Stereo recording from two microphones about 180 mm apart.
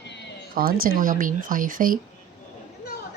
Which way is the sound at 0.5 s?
55° right (ahead or behind).